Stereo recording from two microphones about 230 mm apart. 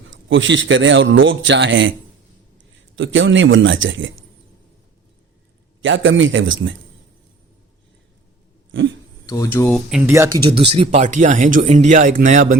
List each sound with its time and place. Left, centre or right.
0.1 s speech: right
2.9 s speech: right
5.8 s speech: right
8.7 s speech: right
9.2 s speech: centre
9.9 s speech: centre; by 12.5 s right